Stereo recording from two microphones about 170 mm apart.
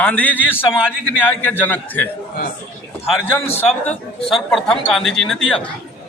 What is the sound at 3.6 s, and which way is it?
A woman's voice, 10° left (ahead or behind).